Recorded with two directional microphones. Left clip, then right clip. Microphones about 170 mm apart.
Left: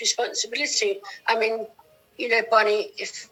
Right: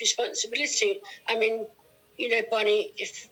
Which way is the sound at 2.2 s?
45° left (ahead or behind).